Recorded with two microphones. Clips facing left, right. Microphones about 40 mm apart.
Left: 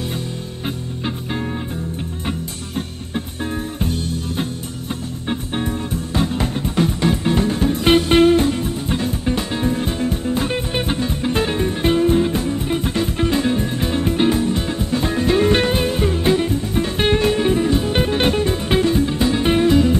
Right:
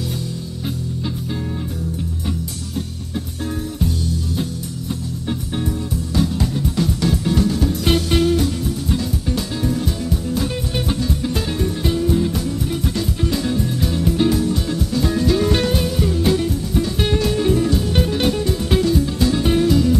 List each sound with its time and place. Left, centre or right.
3.8 s music: left
6.1 s music: left